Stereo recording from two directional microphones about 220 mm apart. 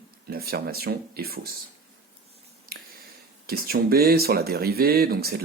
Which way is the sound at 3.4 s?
45° right (ahead or behind).